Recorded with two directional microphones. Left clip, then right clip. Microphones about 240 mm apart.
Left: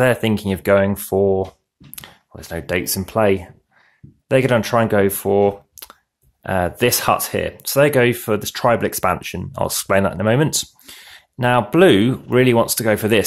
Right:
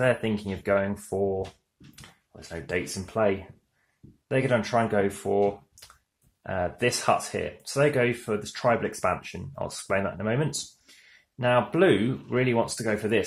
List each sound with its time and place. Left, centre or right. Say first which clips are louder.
0.0 s speech: left 8 dB; left